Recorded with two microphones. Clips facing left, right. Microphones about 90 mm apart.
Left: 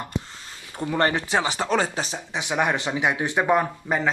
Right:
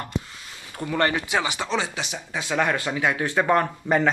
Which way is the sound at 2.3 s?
15° left (ahead or behind).